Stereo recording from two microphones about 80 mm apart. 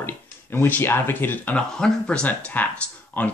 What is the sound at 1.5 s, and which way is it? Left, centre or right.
Speech, centre.